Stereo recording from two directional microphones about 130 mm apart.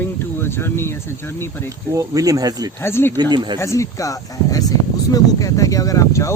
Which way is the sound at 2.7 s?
20° left (ahead or behind).